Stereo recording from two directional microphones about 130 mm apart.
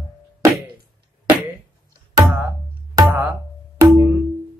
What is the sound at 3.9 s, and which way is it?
Music, 20° right (ahead or behind).